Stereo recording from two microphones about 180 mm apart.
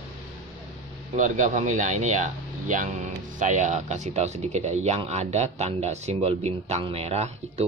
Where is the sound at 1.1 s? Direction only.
45° right (ahead or behind).